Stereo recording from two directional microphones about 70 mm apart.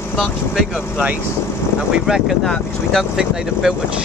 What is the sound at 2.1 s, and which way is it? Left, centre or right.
Speech, centre.